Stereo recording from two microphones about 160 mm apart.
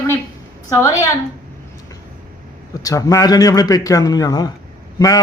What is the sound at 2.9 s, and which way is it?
Speech, 20° left (ahead or behind).